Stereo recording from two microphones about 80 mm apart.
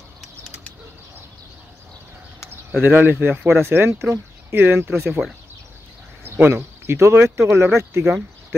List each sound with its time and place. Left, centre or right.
2.8 s speech: right
6.2 s speech: right